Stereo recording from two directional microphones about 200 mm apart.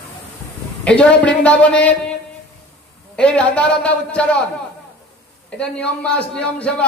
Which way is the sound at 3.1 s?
5° left (ahead or behind).